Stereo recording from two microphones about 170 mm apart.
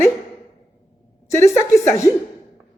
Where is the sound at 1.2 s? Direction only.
15° left (ahead or behind).